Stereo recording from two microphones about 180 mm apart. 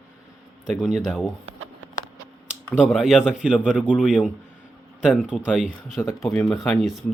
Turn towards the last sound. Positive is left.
turn(degrees=0)  # may be behind; listen again after turning